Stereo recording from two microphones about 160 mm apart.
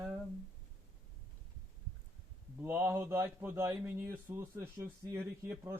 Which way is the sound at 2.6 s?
15° right (ahead or behind).